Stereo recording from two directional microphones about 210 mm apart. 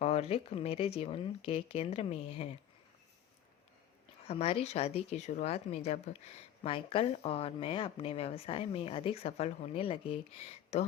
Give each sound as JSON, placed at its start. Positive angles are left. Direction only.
{"t": 0.0, "sound": "speech", "side_deg": 30}
{"t": 4.3, "sound": "speech", "side_deg": 30}